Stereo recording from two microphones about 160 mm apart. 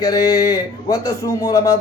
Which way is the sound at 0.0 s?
20° left (ahead or behind).